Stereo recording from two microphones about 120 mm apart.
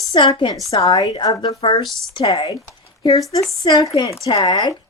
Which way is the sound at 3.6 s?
35° left (ahead or behind).